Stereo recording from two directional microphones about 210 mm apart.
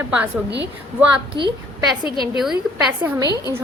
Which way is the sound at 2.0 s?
20° left (ahead or behind).